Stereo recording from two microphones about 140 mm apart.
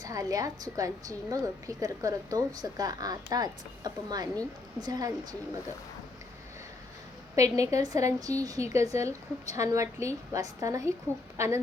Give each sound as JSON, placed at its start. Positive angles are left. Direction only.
{"t": 0.0, "sound": "a woman's voice", "side_deg": -25}
{"t": 7.3, "sound": "a woman's voice", "side_deg": -25}